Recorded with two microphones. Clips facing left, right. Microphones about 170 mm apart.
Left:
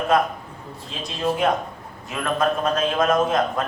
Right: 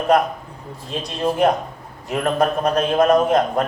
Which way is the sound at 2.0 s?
40° right (ahead or behind).